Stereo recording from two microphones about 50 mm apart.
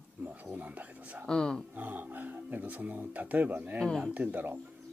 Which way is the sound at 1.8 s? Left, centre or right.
Right.